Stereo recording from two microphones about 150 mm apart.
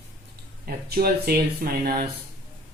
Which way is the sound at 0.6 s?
90° right.